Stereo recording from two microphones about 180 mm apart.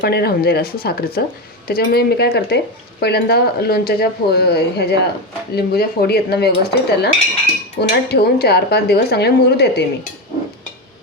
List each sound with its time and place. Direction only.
0.0 s speech: 65° left (ahead or behind)